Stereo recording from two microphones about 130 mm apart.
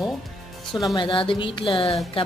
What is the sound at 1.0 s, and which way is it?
A woman's voice, 40° left (ahead or behind).